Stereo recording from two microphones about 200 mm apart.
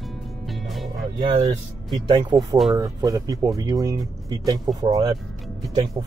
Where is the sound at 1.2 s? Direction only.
25° right (ahead or behind).